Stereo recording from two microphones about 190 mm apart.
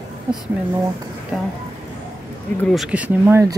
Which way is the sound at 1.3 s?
5° right (ahead or behind).